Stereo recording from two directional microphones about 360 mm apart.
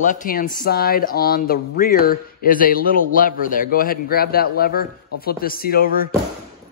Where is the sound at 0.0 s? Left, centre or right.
Left.